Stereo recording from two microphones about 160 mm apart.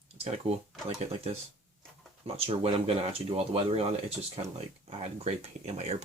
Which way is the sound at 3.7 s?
40° right (ahead or behind).